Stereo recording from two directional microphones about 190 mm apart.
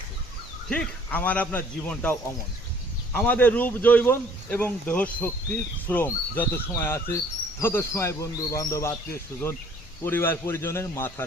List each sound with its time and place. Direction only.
0.7 s speech: 10° left (ahead or behind)
10.0 s speech: 10° left (ahead or behind)